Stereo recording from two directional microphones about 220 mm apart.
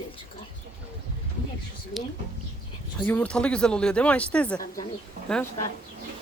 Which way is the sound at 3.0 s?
5° left (ahead or behind).